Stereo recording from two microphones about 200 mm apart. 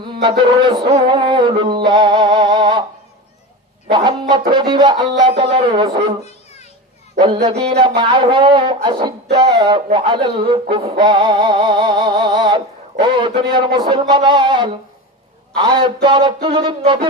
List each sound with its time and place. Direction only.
0.1 s music: 25° right (ahead or behind)
3.8 s speech: 25° right (ahead or behind)
7.7 s speech: 25° right (ahead or behind)
15.8 s speech: 25° right (ahead or behind)